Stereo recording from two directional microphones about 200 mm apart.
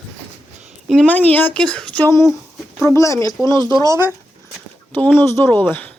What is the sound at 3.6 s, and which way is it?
Speech, 20° right (ahead or behind).